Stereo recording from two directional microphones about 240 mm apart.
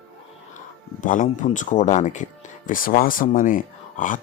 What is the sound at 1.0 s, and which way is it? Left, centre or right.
Speech, left.